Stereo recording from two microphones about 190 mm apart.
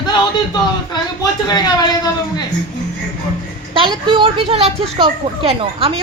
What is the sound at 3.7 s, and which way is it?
A woman's voice, 25° right (ahead or behind).